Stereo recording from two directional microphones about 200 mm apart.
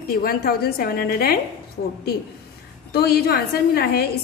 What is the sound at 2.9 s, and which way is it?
A woman's voice, 50° left (ahead or behind).